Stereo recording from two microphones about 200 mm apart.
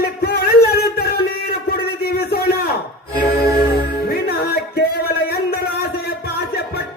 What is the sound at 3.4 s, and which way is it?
Music, 50° left (ahead or behind).